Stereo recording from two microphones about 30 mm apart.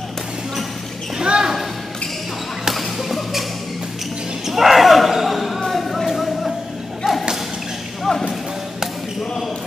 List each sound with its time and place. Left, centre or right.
1.2 s basketball bounce: right
2.7 s basketball bounce: centre
4.5 s basketball bounce: centre
5.7 s music: centre
7.0 s a sound: centre
8.0 s clip-clop: centre